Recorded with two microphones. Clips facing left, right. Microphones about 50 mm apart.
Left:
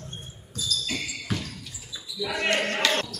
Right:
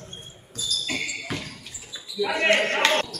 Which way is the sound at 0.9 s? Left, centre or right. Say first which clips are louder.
Right 2 dB; centre.